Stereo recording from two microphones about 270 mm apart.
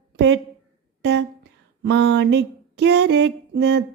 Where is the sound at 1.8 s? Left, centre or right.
Right.